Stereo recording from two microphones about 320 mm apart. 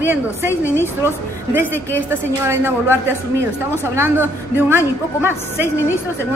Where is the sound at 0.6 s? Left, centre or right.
Centre.